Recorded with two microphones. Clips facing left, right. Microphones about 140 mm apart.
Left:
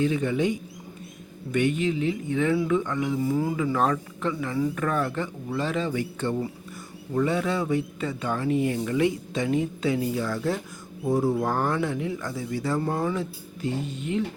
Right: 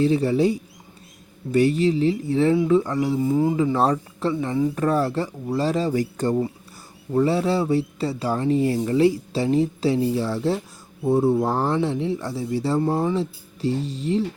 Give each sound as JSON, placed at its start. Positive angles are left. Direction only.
{"t": 0.0, "sound": "speech", "side_deg": -35}
{"t": 3.2, "sound": "speech", "side_deg": -20}